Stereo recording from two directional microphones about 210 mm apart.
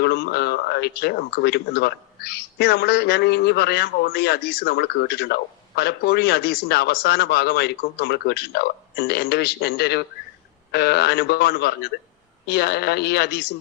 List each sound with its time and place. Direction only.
0.0 s speech: 50° left (ahead or behind)